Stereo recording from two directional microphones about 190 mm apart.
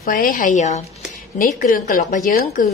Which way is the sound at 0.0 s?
45° left (ahead or behind).